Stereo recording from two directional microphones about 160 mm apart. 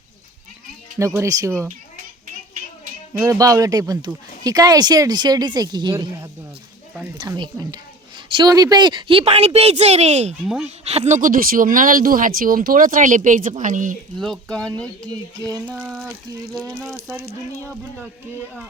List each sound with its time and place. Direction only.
0.9 s speech: 20° right (ahead or behind)
3.2 s speech: 20° right (ahead or behind); by 10.3 s 45° right (ahead or behind)
10.4 s speech: 5° right (ahead or behind)
10.8 s speech: 45° right (ahead or behind)
14.2 s speech: centre (ahead or behind)
15.4 s speech: 20° right (ahead or behind)
15.6 s speech: 10° right (ahead or behind)